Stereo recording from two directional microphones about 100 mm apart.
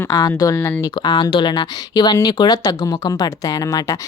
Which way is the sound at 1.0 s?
45° left (ahead or behind).